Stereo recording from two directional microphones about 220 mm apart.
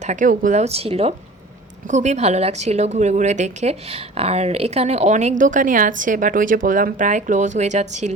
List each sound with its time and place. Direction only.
0.0 s a woman's voice: 35° right (ahead or behind)